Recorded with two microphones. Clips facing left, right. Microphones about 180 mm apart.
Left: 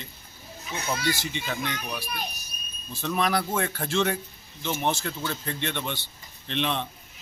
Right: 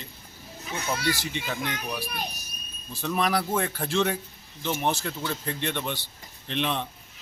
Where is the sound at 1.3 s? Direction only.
Centre (ahead or behind).